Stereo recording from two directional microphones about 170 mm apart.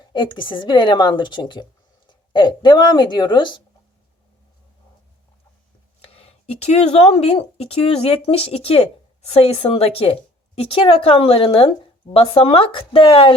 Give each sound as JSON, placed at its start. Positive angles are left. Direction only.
{"t": 0.0, "sound": "speech", "side_deg": 25}
{"t": 6.0, "sound": "speech", "side_deg": 35}